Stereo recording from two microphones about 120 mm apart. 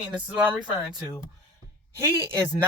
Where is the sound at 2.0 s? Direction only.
20° right (ahead or behind).